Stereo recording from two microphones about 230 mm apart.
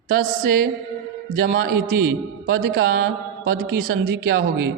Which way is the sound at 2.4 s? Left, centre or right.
Right.